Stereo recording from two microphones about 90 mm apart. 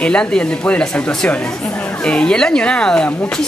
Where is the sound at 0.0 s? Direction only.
10° left (ahead or behind).